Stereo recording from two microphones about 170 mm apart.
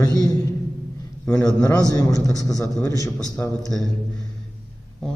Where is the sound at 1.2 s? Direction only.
5° left (ahead or behind).